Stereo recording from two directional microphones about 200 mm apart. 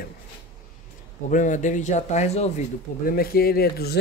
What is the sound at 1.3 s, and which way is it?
A man's voice, 40° left (ahead or behind).